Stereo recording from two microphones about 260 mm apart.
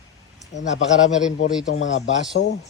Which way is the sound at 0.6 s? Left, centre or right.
Left.